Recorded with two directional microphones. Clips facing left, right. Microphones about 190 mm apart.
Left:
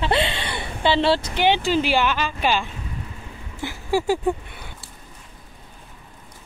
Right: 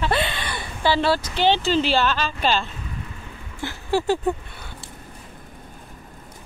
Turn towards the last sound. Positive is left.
turn(degrees=10)  # may be behind; listen again after turning